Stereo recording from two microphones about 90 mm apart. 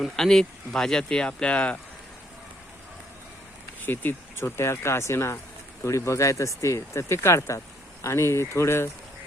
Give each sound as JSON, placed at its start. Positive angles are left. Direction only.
{"t": 0.0, "sound": "speech", "side_deg": 5}
{"t": 3.8, "sound": "speech", "side_deg": 25}